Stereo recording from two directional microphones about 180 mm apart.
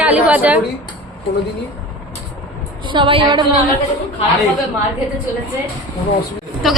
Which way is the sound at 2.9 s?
30° right (ahead or behind).